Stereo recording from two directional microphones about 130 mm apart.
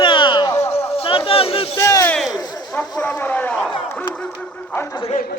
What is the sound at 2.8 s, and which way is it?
Speech, 10° left (ahead or behind).